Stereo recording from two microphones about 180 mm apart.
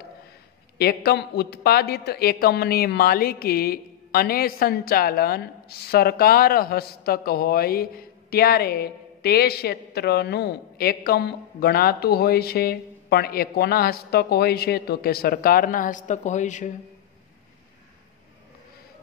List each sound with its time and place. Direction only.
0.7 s speech: 60° left (ahead or behind); by 16.7 s 45° left (ahead or behind)